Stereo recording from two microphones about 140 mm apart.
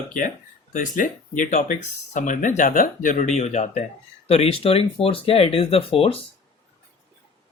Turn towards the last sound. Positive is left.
turn(degrees=45)  # may be behind; listen again after turning